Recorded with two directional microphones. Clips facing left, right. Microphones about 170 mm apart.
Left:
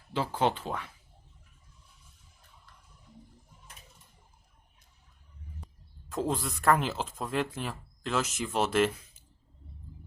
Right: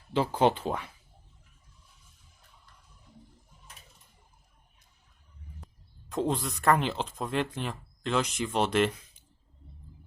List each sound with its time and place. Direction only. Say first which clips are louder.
0.1 s speech: right 4 dB; 15° right (ahead or behind)
6.1 s speech: right 2 dB; centre (ahead or behind)